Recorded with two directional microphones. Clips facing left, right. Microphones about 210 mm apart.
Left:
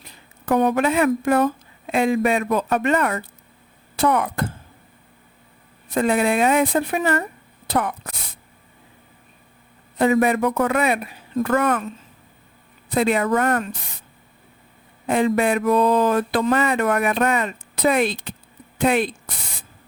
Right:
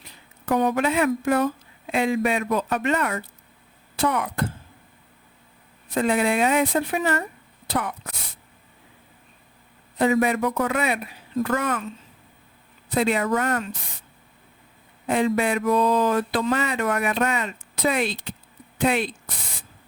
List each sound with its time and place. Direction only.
0.4 s speech: 55° left (ahead or behind)
5.9 s speech: 50° left (ahead or behind)
10.0 s speech: 55° left (ahead or behind)
12.9 s speech: 55° left (ahead or behind)
15.0 s speech: 50° left (ahead or behind)